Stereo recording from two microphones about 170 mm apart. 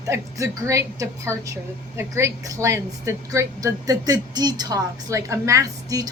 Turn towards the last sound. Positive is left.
turn(degrees=-20)  # may be behind; listen again after turning